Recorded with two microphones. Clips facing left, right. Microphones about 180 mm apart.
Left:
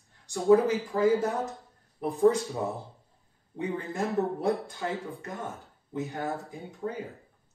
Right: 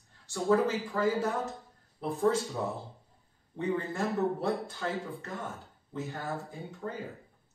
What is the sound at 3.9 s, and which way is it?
Speech, 15° left (ahead or behind).